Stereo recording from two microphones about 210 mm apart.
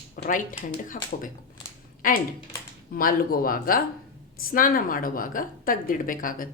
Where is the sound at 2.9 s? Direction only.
40° left (ahead or behind).